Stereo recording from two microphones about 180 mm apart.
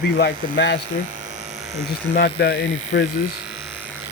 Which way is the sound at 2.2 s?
65° left (ahead or behind).